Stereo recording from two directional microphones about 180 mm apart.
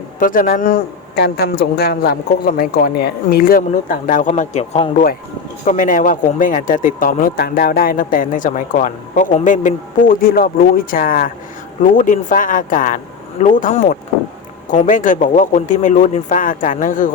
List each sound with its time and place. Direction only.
0.2 s speech: 50° left (ahead or behind)
1.2 s speech: 65° left (ahead or behind); by 17.2 s 45° left (ahead or behind)